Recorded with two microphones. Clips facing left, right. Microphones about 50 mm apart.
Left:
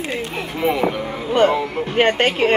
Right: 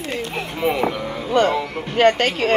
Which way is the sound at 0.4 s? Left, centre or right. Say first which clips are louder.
Left 1 dB; centre.